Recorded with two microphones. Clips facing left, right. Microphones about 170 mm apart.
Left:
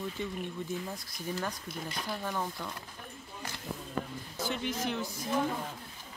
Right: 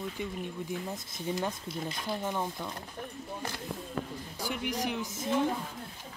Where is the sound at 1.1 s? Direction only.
25° right (ahead or behind).